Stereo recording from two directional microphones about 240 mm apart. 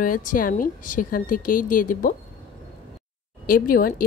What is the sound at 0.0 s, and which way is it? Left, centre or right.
A woman's voice, left.